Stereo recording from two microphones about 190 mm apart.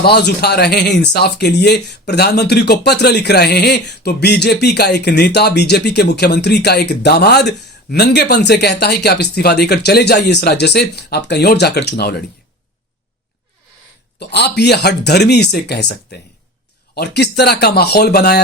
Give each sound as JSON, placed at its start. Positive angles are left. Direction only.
{"t": 0.0, "sound": "speech", "side_deg": 60}
{"t": 14.2, "sound": "speech", "side_deg": 60}